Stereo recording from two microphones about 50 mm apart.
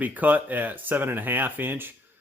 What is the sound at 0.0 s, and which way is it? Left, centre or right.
Speech, right.